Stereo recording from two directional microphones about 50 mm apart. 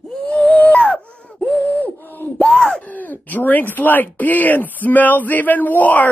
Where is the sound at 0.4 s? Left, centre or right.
Left.